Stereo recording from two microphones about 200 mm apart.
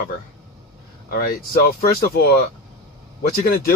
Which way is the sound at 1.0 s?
50° left (ahead or behind).